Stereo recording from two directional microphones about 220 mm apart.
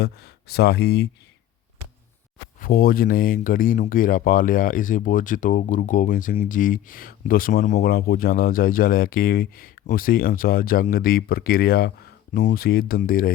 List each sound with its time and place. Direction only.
0.0 s speech: 45° left (ahead or behind)
2.6 s speech: 40° left (ahead or behind)